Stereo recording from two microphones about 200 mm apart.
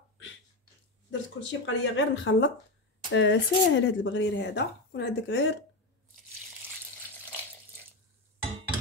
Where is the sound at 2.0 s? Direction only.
70° left (ahead or behind).